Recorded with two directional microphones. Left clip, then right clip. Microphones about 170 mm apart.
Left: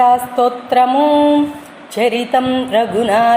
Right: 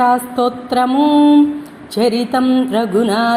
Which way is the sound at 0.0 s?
15° right (ahead or behind).